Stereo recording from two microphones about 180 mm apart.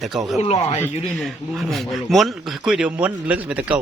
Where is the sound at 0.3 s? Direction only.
35° left (ahead or behind).